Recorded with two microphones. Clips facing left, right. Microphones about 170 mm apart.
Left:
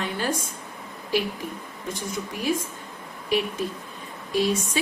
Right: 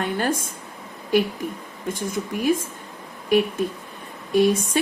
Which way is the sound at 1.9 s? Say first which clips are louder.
Right 5 dB; 50° right (ahead or behind).